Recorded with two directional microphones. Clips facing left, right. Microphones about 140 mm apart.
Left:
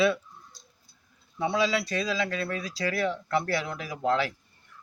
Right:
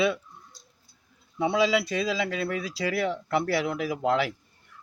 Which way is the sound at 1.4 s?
20° right (ahead or behind).